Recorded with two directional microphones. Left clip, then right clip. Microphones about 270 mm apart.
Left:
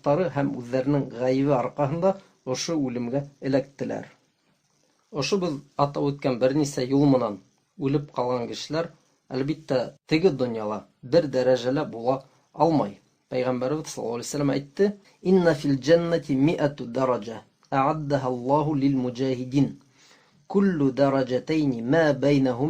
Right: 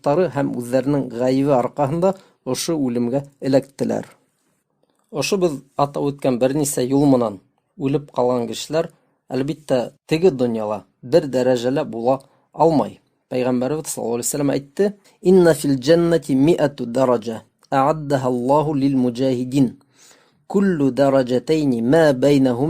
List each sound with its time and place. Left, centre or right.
0.0 s speech: right